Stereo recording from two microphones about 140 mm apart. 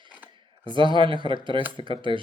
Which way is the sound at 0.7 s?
35° right (ahead or behind).